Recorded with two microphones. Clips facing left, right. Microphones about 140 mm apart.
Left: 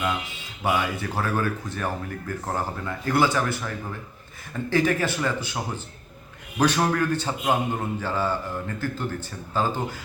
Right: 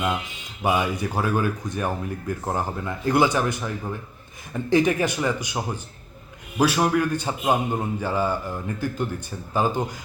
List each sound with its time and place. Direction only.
0.6 s speech: 15° right (ahead or behind)